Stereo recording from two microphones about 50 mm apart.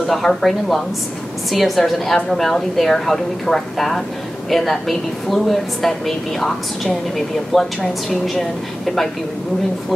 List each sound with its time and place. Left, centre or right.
0.0 s a woman's voice: centre